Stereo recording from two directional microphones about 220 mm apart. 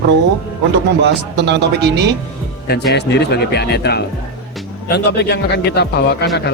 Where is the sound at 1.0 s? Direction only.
50° right (ahead or behind).